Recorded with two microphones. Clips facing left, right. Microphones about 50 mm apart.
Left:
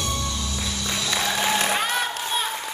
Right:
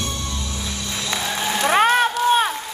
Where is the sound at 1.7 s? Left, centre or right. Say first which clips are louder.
Right 8 dB; right.